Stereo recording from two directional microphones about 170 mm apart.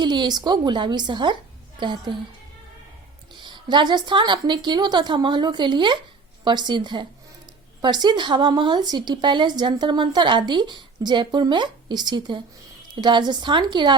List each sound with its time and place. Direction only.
0.0 s speech: 25° right (ahead or behind)
3.4 s speech: 25° right (ahead or behind)